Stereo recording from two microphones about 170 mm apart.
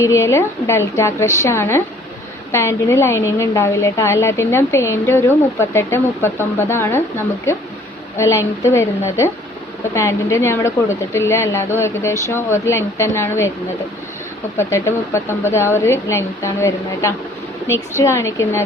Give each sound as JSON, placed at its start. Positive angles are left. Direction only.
{"t": 0.0, "sound": "a woman's voice", "side_deg": 15}
{"t": 8.2, "sound": "a woman's voice", "side_deg": 15}
{"t": 14.6, "sound": "a woman's voice", "side_deg": 15}